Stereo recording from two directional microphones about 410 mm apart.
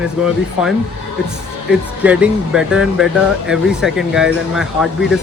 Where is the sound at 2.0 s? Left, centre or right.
Centre.